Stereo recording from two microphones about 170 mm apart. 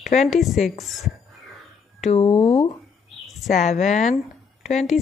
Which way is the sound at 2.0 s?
40° left (ahead or behind).